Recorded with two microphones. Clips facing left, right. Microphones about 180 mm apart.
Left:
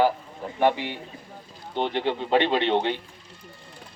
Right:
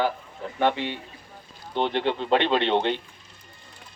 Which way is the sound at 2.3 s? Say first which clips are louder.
Even; 10° left (ahead or behind).